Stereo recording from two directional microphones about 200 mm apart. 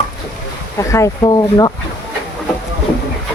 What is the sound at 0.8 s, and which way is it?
Speech, 15° left (ahead or behind).